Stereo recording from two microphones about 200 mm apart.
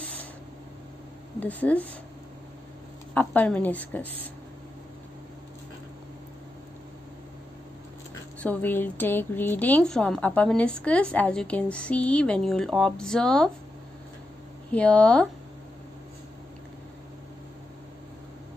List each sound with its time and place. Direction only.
1.4 s a woman's voice: 10° left (ahead or behind)
3.2 s a woman's voice: 5° left (ahead or behind)
8.4 s a woman's voice: 10° left (ahead or behind)
14.7 s a woman's voice: 5° left (ahead or behind)